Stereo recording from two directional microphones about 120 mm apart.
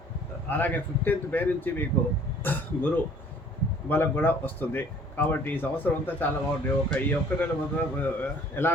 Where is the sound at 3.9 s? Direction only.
15° left (ahead or behind).